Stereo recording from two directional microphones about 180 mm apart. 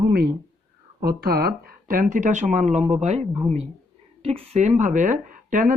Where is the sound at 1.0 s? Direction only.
60° right (ahead or behind); by 3.2 s 40° right (ahead or behind).